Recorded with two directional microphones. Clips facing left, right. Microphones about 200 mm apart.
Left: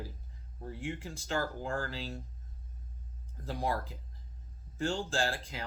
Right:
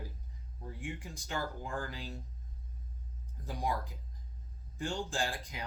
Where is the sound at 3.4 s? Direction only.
15° right (ahead or behind).